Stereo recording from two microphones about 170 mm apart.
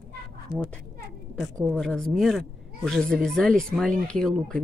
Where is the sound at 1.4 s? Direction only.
5° left (ahead or behind).